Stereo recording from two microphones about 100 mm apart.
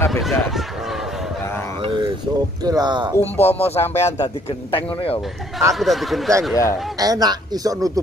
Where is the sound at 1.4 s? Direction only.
25° left (ahead or behind).